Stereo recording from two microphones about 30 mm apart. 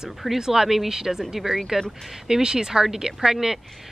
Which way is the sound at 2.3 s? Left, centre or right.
Right.